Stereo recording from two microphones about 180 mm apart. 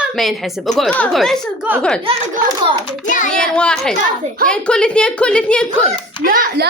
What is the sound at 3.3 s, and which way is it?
A woman's voice, 5° left (ahead or behind).